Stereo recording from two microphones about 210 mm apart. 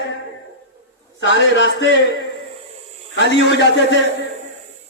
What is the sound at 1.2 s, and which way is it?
Speech, 60° left (ahead or behind).